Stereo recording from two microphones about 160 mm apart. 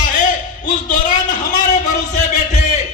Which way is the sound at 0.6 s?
55° left (ahead or behind).